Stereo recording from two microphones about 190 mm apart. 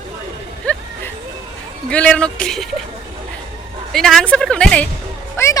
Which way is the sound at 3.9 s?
Centre (ahead or behind).